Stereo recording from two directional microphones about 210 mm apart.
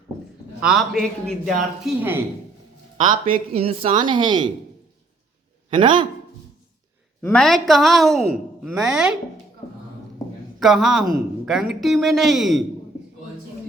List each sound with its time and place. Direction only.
0.6 s a man's voice: centre (ahead or behind)
3.1 s speech: 40° right (ahead or behind)
3.6 s a woman's voice: 25° right (ahead or behind)
5.7 s a woman's voice: 20° right (ahead or behind)
7.2 s a man's voice: 5° left (ahead or behind)
9.6 s a sound: 20° left (ahead or behind)
10.6 s a man's voice: centre (ahead or behind)